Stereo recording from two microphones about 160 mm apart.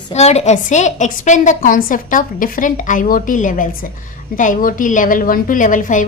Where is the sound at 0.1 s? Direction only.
40° left (ahead or behind).